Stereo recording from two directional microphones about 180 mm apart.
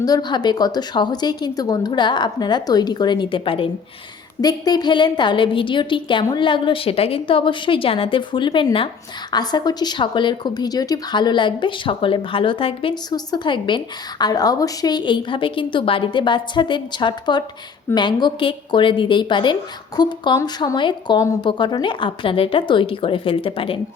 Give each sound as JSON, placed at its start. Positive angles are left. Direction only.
{"t": 0.0, "sound": "speech", "side_deg": 20}